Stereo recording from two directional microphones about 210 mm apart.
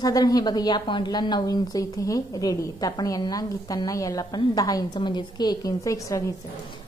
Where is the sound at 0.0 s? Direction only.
15° left (ahead or behind).